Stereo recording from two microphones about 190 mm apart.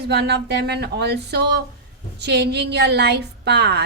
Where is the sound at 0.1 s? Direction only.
60° right (ahead or behind).